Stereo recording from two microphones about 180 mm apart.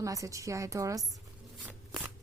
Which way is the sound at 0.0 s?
20° right (ahead or behind).